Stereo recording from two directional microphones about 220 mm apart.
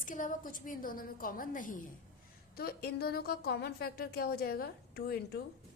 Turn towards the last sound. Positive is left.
turn(degrees=45)  # may be behind; listen again after turning